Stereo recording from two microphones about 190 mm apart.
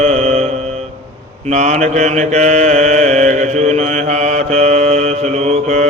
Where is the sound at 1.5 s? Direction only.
35° right (ahead or behind).